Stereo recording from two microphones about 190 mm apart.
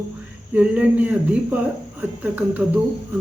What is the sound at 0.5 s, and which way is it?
Speech, 5° right (ahead or behind).